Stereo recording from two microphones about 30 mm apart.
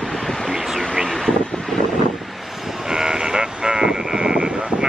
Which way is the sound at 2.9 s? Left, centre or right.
Right.